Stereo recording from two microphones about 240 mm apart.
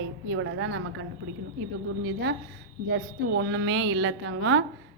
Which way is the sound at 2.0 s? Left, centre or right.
Right.